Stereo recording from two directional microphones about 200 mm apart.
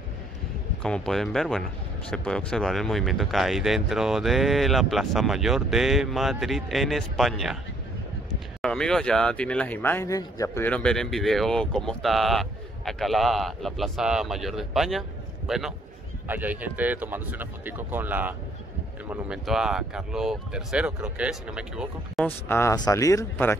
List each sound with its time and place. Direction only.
0.8 s speech: 5° left (ahead or behind)
8.5 s speech: 5° left (ahead or behind)
22.2 s speech: 10° left (ahead or behind)